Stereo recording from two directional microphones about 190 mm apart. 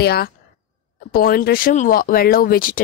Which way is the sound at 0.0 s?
55° left (ahead or behind).